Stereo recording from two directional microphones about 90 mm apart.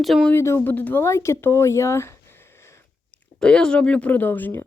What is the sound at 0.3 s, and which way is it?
Speech, 30° left (ahead or behind).